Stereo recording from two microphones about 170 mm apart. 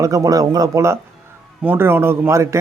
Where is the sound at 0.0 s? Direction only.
20° right (ahead or behind).